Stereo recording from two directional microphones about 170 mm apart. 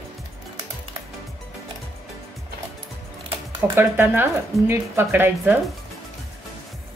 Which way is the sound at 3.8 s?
10° right (ahead or behind).